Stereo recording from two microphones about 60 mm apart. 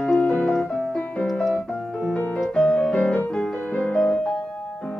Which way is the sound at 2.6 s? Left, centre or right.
Centre.